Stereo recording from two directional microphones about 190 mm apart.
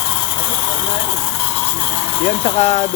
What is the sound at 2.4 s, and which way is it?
Speech, 35° left (ahead or behind).